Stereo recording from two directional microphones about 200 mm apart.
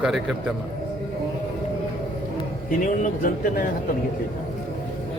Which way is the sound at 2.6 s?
40° left (ahead or behind).